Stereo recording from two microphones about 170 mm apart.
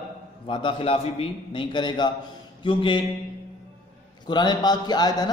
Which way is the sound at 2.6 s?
30° left (ahead or behind).